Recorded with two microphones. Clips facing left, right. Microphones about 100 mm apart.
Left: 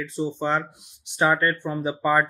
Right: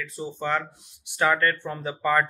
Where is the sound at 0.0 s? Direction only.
25° left (ahead or behind).